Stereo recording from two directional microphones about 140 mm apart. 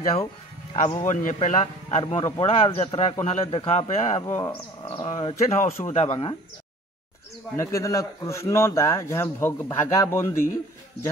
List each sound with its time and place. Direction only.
1.0 s speech: 60° left (ahead or behind)
3.4 s a man's voice: 40° left (ahead or behind)
3.7 s speech: 55° left (ahead or behind)
4.4 s speech: 35° left (ahead or behind)
7.5 s speech: 20° left (ahead or behind)